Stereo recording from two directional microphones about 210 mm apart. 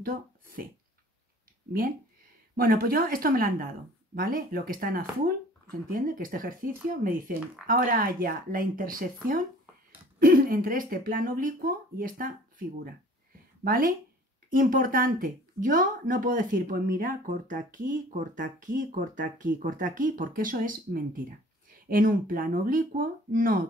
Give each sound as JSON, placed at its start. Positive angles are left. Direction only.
{"t": 0.0, "sound": "a sound", "side_deg": -45}
{"t": 1.7, "sound": "speech", "side_deg": -45}
{"t": 13.7, "sound": "speech", "side_deg": -45}